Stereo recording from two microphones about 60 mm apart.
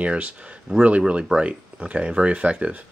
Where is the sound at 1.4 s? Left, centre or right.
Right.